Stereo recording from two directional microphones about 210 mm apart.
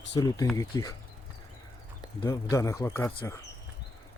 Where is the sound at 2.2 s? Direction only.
15° left (ahead or behind).